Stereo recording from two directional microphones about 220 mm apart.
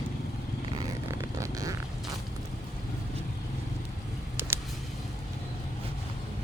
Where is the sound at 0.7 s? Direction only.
15° right (ahead or behind).